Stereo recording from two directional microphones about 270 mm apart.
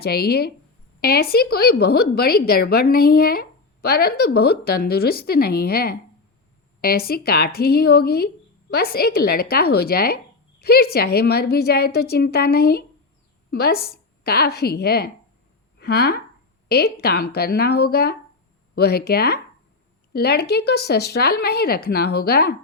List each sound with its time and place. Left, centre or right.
0.0 s a woman's voice: left
13.7 s a woman's voice: left
14.3 s a woman's voice: left